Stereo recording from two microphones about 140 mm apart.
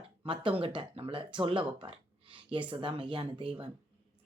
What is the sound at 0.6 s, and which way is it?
Speech, 40° right (ahead or behind).